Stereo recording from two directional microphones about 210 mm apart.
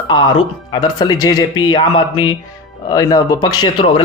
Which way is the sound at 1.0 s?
20° left (ahead or behind).